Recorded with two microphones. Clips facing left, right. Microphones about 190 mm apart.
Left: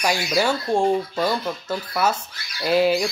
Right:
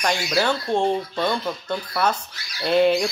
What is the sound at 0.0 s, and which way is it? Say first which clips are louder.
Speech: left 1 dB; 5° left (ahead or behind).